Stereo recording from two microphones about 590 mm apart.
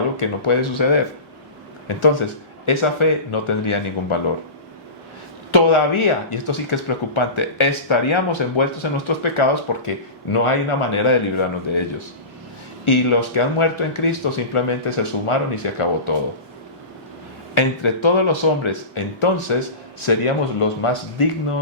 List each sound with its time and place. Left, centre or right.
0.2 s speech: left
5.5 s speech: left
17.5 s speech: left